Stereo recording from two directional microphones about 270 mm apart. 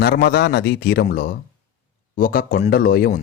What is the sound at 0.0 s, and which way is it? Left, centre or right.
Speech, left.